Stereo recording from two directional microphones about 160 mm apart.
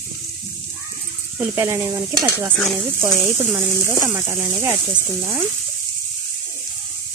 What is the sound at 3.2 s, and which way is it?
Speech, 15° right (ahead or behind).